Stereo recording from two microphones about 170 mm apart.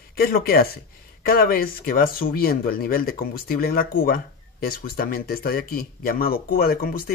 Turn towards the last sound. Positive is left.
turn(degrees=60)  # may be behind; listen again after turning